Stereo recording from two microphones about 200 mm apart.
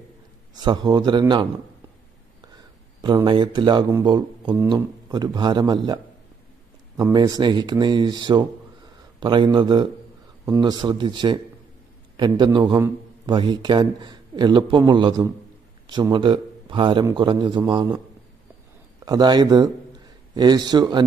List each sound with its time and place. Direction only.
0.6 s speech: 20° right (ahead or behind)
3.0 s speech: 25° right (ahead or behind)
7.0 s a man's voice: 20° right (ahead or behind)
19.0 s speech: 20° right (ahead or behind)